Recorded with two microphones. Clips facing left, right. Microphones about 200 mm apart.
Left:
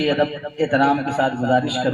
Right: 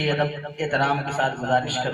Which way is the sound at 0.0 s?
30° left (ahead or behind).